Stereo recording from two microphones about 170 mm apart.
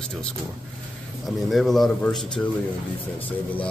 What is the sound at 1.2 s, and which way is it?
A man's voice, centre (ahead or behind).